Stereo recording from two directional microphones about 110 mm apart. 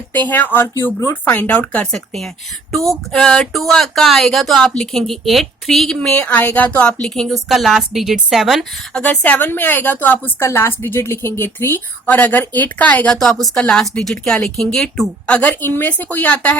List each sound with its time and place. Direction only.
0.1 s a woman's voice: 15° left (ahead or behind)
6.0 s a woman's voice: 15° left (ahead or behind)
9.0 s a woman's voice: 15° left (ahead or behind)